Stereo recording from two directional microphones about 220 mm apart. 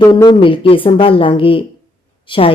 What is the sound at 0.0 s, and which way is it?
Speech, 20° left (ahead or behind).